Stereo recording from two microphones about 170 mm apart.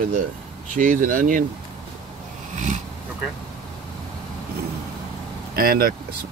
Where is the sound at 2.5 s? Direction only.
45° right (ahead or behind).